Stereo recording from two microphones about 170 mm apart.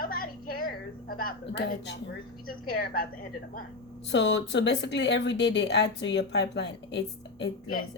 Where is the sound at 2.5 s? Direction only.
60° left (ahead or behind).